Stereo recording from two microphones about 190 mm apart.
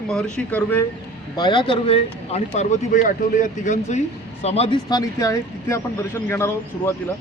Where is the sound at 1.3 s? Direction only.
25° left (ahead or behind).